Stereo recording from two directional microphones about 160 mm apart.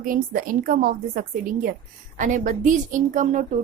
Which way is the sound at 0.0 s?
60° right (ahead or behind).